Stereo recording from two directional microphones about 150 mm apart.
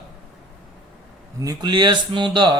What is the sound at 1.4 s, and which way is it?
Speech, 25° right (ahead or behind).